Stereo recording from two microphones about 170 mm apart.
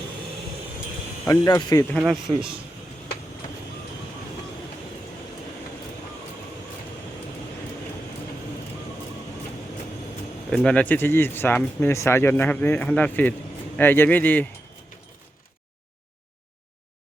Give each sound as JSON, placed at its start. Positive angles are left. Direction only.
{"t": 1.3, "sound": "speech", "side_deg": 20}
{"t": 2.0, "sound": "a man's voice", "side_deg": -5}
{"t": 10.5, "sound": "speech", "side_deg": 5}